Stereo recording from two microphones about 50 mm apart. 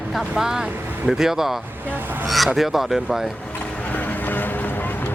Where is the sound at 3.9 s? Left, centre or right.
Left.